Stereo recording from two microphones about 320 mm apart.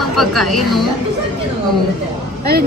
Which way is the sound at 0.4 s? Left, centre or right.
Centre.